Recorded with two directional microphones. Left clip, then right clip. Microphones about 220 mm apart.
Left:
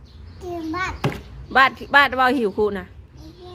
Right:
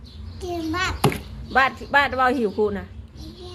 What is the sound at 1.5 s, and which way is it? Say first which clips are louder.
Speech: left 4 dB; 15° left (ahead or behind).